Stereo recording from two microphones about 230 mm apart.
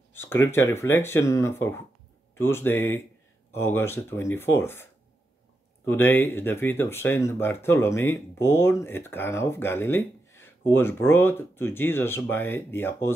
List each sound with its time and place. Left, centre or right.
0.1 s speech: centre
5.9 s speech: centre